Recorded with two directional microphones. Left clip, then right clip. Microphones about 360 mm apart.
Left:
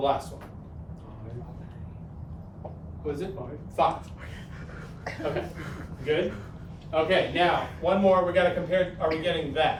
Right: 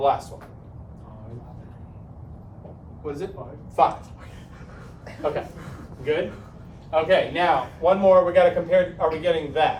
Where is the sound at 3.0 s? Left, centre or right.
Centre.